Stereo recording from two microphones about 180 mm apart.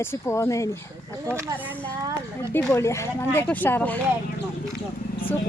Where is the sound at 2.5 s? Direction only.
15° left (ahead or behind).